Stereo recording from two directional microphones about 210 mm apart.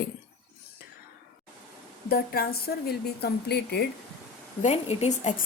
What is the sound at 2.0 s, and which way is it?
Speech, 45° left (ahead or behind).